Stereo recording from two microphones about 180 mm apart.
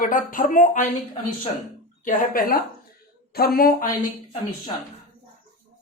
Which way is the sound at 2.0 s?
50° left (ahead or behind).